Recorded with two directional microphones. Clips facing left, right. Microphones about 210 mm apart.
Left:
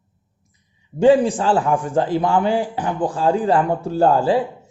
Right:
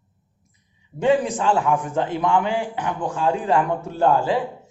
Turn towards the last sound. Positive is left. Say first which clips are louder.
# left 3 dB
turn(degrees=35)  # may be behind; listen again after turning